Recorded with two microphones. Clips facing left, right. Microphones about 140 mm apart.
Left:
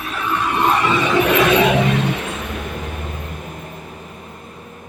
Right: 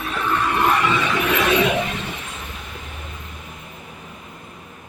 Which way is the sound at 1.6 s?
85° left.